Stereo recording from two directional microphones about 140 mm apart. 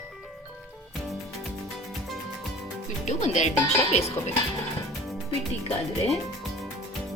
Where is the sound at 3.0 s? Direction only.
55° left (ahead or behind).